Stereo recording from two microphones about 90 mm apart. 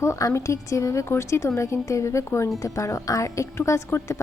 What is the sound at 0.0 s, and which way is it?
A woman's voice, 35° left (ahead or behind).